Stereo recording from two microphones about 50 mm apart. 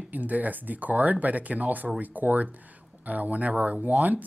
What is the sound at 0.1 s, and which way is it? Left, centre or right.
Speech, right.